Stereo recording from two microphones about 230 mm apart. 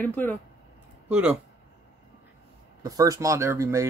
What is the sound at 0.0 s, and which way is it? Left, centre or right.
Speech, centre.